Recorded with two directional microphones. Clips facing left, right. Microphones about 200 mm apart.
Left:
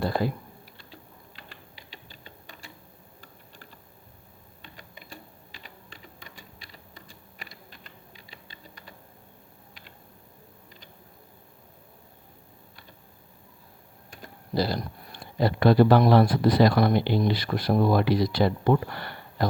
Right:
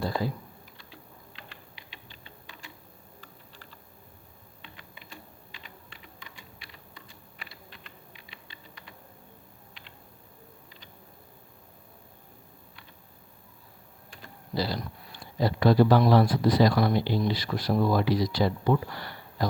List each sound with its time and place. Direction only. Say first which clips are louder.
0.0 s speech: left 3 dB; 60° left (ahead or behind)
1.7 s a sound: left 2 dB; 40° left (ahead or behind)
4.6 s typing: left 2 dB; 45° left (ahead or behind)
14.2 s speech: left 4 dB; 45° left (ahead or behind)